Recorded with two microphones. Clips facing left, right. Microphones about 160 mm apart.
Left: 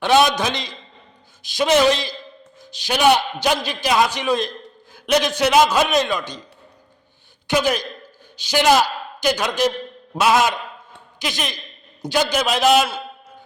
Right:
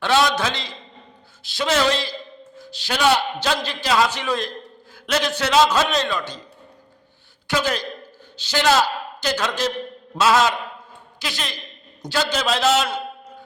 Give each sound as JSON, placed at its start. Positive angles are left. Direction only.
{"t": 0.0, "sound": "a man's voice", "side_deg": 20}
{"t": 7.4, "sound": "a man's voice", "side_deg": 15}